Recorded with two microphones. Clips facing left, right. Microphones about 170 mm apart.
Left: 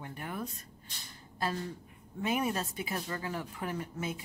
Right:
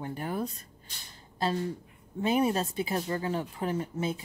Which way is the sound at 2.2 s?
30° right (ahead or behind).